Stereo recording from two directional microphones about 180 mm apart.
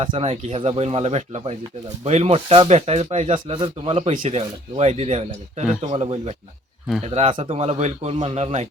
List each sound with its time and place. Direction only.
0.0 s speech: 30° right (ahead or behind)
3.4 s speech: 30° right (ahead or behind)
4.1 s speech: 40° right (ahead or behind)